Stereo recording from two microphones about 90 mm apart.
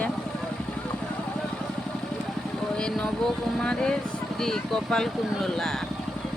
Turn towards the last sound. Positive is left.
turn(degrees=5)  # may be behind; listen again after turning